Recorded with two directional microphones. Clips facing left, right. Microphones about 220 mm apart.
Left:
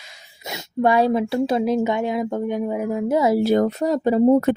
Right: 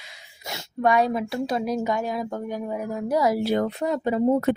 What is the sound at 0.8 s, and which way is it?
Speech, 30° left (ahead or behind).